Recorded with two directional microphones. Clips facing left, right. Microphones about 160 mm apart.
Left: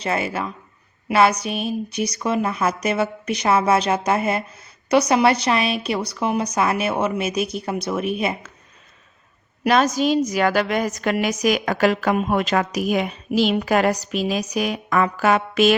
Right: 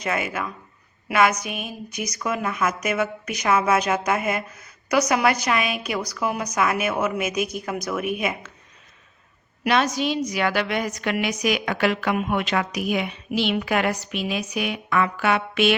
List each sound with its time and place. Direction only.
0.0 s a woman's voice: 30° left (ahead or behind)
9.6 s a woman's voice: 40° left (ahead or behind)